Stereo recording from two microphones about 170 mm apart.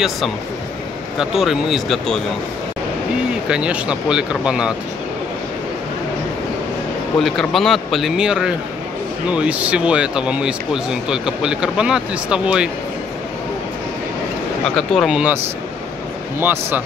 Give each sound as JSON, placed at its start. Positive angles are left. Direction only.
{"t": 1.1, "sound": "speech", "side_deg": -5}
{"t": 3.4, "sound": "speech", "side_deg": -5}
{"t": 7.2, "sound": "speech", "side_deg": 0}
{"t": 14.8, "sound": "speech", "side_deg": 0}
{"t": 16.3, "sound": "speech", "side_deg": -10}